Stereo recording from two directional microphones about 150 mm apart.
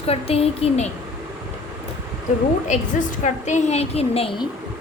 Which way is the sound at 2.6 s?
55° left (ahead or behind).